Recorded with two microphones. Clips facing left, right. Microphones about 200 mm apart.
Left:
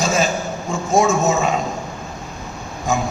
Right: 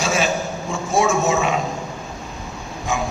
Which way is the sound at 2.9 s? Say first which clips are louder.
Left 3 dB; 40° left (ahead or behind).